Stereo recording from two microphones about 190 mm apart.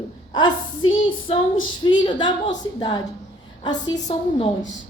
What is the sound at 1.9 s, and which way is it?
A woman's voice, 25° left (ahead or behind).